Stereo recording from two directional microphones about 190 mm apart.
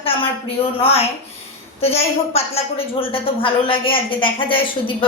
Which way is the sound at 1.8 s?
30° left (ahead or behind).